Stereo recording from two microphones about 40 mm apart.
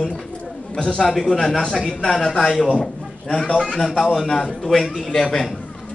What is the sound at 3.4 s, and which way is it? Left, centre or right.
Speech, left.